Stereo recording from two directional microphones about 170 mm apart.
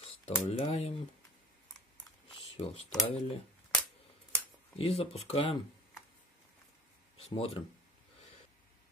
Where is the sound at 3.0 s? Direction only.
30° left (ahead or behind).